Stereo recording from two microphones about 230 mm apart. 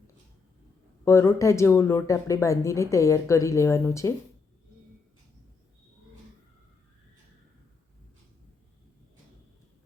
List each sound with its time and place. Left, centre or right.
1.0 s speech: centre